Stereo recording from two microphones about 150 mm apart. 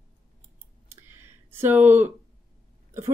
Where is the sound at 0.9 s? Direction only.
15° right (ahead or behind).